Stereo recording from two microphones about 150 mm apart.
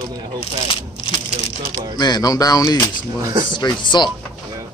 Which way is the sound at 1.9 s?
25° left (ahead or behind).